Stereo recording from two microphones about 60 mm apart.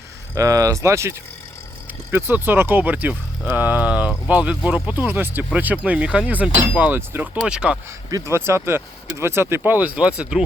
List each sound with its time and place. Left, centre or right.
0.3 s speech: right
2.0 s speech: right
5.5 s speech: right
7.3 s speech: centre
8.3 s speech: right
9.9 s speech: centre